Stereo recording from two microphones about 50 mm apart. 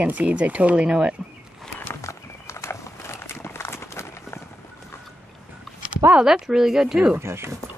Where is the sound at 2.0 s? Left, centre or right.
Left.